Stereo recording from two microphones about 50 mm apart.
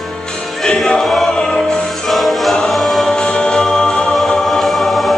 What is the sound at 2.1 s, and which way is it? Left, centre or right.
Choir, centre.